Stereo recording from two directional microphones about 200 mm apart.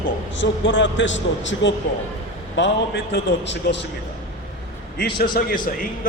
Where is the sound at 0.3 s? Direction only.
65° left (ahead or behind).